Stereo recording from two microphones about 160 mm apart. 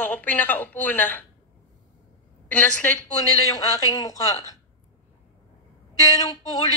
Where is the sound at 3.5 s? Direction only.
20° left (ahead or behind).